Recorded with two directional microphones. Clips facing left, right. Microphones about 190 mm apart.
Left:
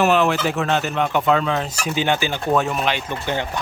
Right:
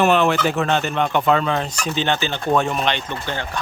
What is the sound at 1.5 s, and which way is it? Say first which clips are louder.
Speech: even; centre (ahead or behind).